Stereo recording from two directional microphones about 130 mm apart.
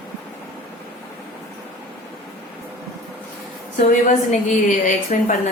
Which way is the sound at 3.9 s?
70° left (ahead or behind).